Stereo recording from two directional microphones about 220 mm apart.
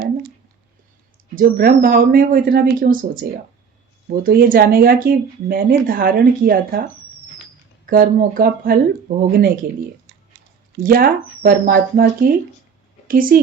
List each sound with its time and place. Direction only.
1.4 s speech: 40° right (ahead or behind)
7.9 s speech: 40° right (ahead or behind)
10.8 s speech: 40° right (ahead or behind)